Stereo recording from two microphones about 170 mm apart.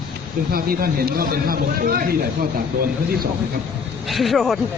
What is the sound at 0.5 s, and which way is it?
A man's voice, 60° right (ahead or behind).